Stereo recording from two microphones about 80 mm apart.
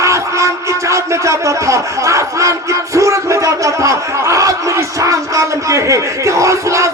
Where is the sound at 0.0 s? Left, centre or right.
Right.